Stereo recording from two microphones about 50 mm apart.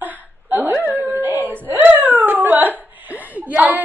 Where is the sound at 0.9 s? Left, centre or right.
Right.